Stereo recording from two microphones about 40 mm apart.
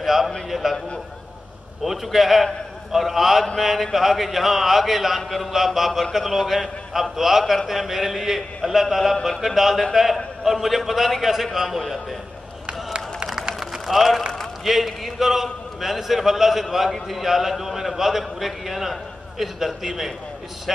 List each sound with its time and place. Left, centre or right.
0.0 s a sound: centre
0.5 s a man's voice: centre
1.9 s a man's voice: centre
12.6 s crowd: right
13.6 s a man's voice: centre